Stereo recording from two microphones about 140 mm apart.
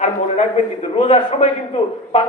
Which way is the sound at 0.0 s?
55° left (ahead or behind).